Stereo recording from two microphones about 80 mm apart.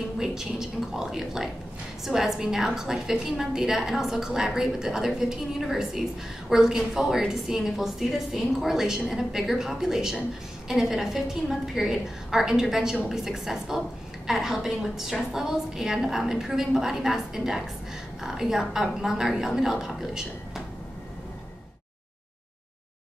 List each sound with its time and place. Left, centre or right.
0.2 s a woman's voice: centre